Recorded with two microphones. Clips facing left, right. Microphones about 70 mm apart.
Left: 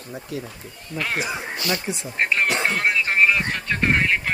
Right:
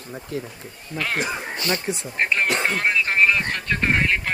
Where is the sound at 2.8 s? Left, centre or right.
Centre.